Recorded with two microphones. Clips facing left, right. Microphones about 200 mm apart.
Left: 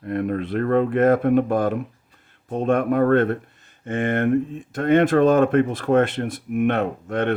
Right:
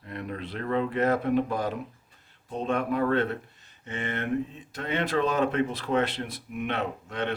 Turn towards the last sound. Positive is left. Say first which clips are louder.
# left 8 dB
turn(degrees=50)  # may be behind; listen again after turning